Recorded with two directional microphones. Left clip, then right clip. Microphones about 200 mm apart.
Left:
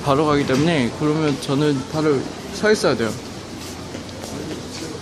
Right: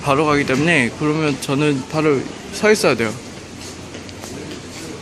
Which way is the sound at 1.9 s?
15° right (ahead or behind).